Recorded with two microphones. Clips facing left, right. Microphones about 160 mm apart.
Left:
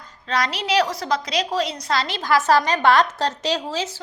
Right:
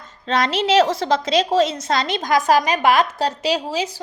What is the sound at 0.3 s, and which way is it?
A woman's voice, 25° right (ahead or behind).